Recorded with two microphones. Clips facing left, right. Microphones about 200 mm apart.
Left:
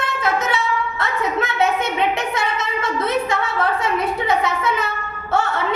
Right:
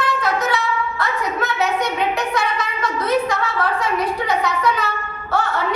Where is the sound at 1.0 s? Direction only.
25° left (ahead or behind).